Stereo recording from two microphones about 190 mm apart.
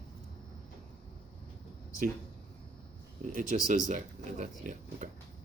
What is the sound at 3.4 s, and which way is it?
Speech, 45° right (ahead or behind).